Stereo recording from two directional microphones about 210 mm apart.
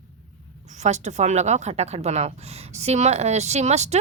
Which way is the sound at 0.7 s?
35° right (ahead or behind).